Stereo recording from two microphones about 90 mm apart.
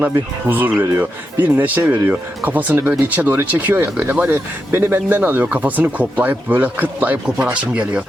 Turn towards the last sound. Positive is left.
turn(degrees=-15)  # may be behind; listen again after turning